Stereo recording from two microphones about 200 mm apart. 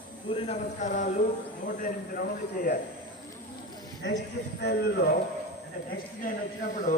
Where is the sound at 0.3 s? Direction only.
35° left (ahead or behind).